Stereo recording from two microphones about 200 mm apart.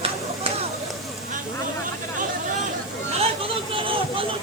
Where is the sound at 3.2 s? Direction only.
30° right (ahead or behind).